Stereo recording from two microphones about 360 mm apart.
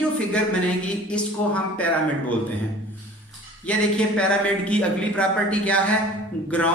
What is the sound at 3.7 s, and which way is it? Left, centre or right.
Speech, centre.